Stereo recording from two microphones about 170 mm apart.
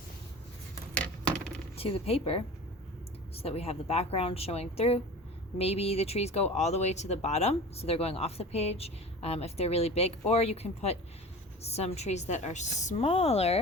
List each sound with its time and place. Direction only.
1.7 s speech: 35° left (ahead or behind)